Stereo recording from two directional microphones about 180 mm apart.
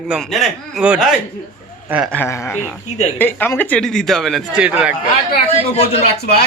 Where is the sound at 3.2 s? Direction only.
10° left (ahead or behind); by 4.9 s 5° right (ahead or behind).